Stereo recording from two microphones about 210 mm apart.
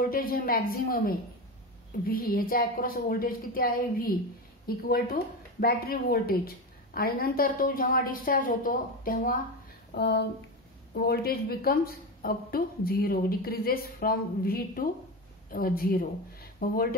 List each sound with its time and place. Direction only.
0.0 s speech: 45° left (ahead or behind)
9.9 s speech: 50° left (ahead or behind)